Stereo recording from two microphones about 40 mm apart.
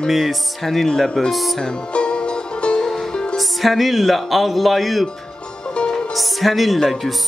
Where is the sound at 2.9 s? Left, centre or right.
Centre.